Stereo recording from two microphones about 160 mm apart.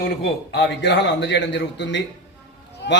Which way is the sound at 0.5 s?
90° left.